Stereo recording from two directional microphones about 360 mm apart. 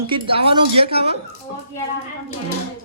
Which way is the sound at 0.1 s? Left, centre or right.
Centre.